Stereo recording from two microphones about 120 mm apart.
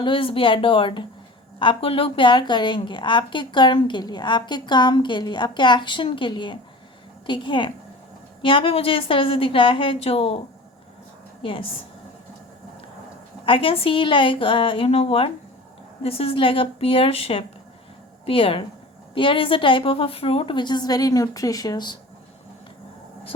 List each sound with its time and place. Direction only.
0.0 s a woman's voice: 45° left (ahead or behind)
11.4 s a woman's voice: 45° left (ahead or behind)
13.4 s a woman's voice: 45° left (ahead or behind)